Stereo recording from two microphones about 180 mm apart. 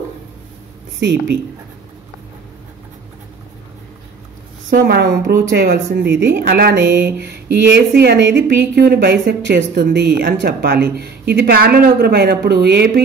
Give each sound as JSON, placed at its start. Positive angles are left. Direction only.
{"t": 0.9, "sound": "a woman's voice", "side_deg": -80}
{"t": 4.6, "sound": "speech", "side_deg": -55}